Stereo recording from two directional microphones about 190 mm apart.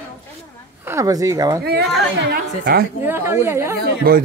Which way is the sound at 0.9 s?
15° right (ahead or behind).